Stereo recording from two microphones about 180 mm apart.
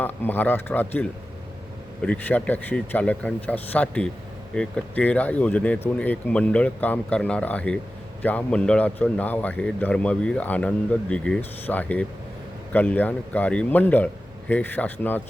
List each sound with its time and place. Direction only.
0.0 s a man's voice: 10° left (ahead or behind)